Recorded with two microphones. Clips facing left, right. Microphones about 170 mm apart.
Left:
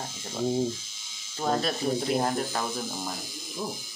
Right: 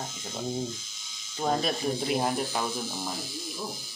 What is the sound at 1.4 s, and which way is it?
Speech, centre (ahead or behind).